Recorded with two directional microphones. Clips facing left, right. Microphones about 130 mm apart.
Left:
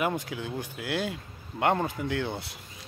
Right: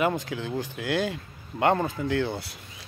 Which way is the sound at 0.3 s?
10° left (ahead or behind).